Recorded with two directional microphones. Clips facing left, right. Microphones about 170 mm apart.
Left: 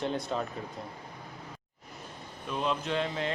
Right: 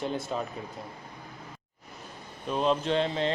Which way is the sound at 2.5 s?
35° right (ahead or behind).